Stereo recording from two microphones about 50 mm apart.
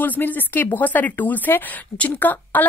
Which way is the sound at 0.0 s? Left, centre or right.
Left.